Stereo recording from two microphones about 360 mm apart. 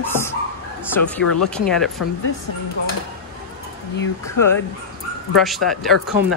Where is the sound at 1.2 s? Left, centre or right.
Left.